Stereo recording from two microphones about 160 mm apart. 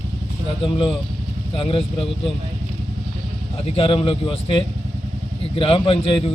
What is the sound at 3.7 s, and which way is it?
A man's voice, 35° left (ahead or behind).